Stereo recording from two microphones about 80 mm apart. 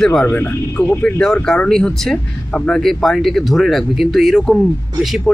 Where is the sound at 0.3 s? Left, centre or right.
Left.